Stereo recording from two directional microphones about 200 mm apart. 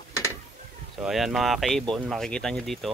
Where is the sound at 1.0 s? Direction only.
5° right (ahead or behind).